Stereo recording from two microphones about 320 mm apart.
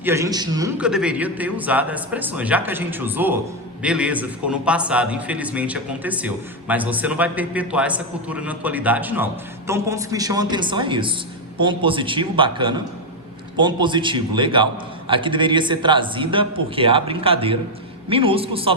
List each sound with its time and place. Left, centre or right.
0.0 s a man's voice: centre